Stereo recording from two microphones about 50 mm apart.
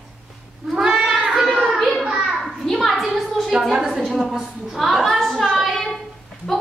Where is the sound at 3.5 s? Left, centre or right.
Centre.